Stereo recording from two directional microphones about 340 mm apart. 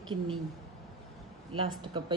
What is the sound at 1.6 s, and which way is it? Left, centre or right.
Speech, centre.